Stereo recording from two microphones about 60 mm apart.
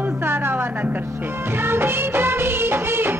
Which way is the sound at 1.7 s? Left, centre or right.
Right.